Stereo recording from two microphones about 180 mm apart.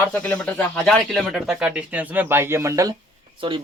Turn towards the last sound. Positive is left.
turn(degrees=-30)  # may be behind; listen again after turning